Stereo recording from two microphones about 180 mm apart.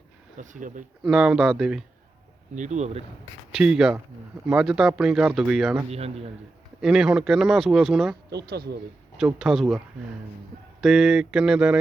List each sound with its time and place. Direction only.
0.3 s speech: 45° right (ahead or behind)
1.0 s speech: centre (ahead or behind)
2.6 s a man's voice: 40° right (ahead or behind)
3.5 s speech: 5° right (ahead or behind)
5.9 s a man's voice: 35° right (ahead or behind)
6.8 s speech: 5° right (ahead or behind)
8.4 s speech: 60° right (ahead or behind)
9.1 s speech: 5° right (ahead or behind)